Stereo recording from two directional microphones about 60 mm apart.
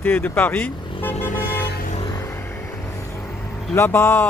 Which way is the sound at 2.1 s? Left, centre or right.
Left.